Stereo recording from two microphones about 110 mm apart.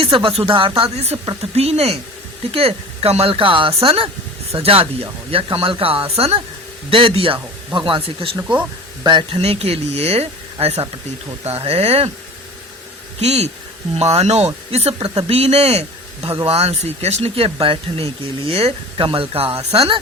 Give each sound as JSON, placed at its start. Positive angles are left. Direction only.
{"t": 0.0, "sound": "speech", "side_deg": -55}
{"t": 0.9, "sound": "speech", "side_deg": -70}
{"t": 9.0, "sound": "speech", "side_deg": -45}
{"t": 9.4, "sound": "speech", "side_deg": -65}
{"t": 13.2, "sound": "speech", "side_deg": -75}